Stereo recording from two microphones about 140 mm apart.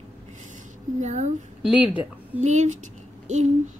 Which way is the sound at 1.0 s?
55° right (ahead or behind).